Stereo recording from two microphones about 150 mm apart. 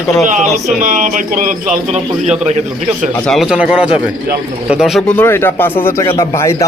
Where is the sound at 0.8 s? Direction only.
60° right (ahead or behind).